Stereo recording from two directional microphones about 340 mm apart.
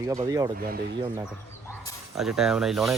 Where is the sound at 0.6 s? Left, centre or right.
Right.